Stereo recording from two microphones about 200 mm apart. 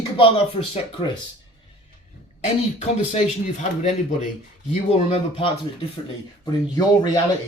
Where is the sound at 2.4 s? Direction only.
35° left (ahead or behind).